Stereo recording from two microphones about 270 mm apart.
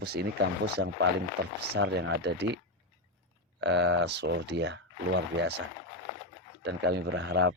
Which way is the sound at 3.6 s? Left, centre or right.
Right.